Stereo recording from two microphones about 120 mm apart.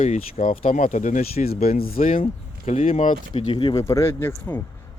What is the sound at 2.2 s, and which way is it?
Speech, 60° left (ahead or behind).